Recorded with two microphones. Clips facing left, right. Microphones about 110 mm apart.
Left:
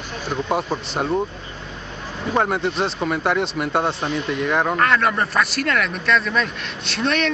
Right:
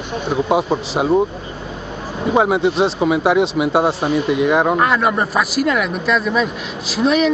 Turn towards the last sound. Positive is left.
turn(degrees=-5)  # may be behind; listen again after turning